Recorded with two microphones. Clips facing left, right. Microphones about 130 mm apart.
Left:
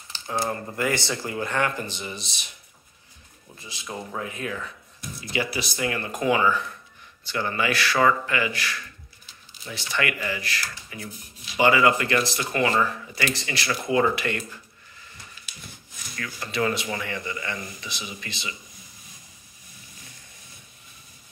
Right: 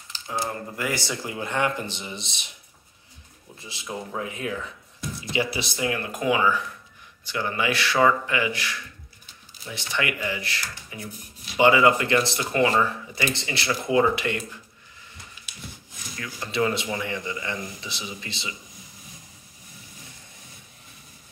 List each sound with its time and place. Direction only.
0.1 s a sound: 35° left (ahead or behind)
0.5 s speech: 10° right (ahead or behind); by 2.5 s 25° right (ahead or behind)
3.5 s speech: 25° right (ahead or behind)
3.8 s speech: 10° right (ahead or behind)
4.3 s speech: 20° right (ahead or behind)
5.9 s speech: 5° right (ahead or behind)
16.2 s speech: 15° right (ahead or behind)